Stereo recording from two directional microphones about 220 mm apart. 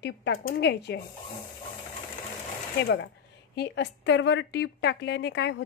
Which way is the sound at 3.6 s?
55° left (ahead or behind).